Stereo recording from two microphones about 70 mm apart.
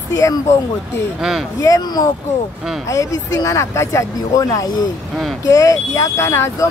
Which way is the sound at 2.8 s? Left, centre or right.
Left.